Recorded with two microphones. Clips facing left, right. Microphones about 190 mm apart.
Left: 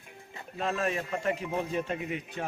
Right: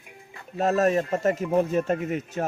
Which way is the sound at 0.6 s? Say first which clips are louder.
Right 9 dB; 40° right (ahead or behind).